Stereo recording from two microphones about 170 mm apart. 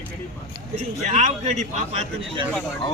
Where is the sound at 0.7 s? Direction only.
45° right (ahead or behind).